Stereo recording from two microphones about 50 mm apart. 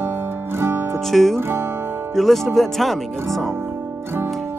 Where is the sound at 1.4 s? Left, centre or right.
Right.